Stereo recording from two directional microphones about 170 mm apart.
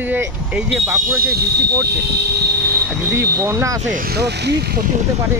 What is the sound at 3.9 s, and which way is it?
Speech, 65° right (ahead or behind).